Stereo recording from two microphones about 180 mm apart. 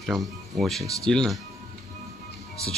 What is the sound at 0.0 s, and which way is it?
Speech, centre (ahead or behind).